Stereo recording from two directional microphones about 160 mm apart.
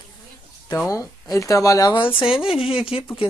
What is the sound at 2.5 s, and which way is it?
Speech, 5° right (ahead or behind).